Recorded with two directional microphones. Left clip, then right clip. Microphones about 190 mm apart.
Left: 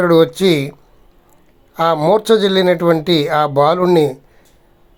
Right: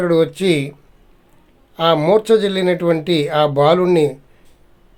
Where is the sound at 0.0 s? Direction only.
15° left (ahead or behind).